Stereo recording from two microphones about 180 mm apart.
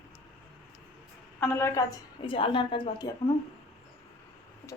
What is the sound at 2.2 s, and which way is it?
Speech, 30° left (ahead or behind).